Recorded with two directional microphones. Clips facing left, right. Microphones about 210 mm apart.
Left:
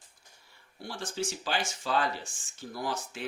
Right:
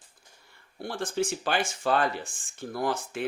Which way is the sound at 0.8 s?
55° right (ahead or behind).